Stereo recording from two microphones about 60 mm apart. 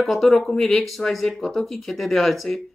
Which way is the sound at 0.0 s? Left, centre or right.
Centre.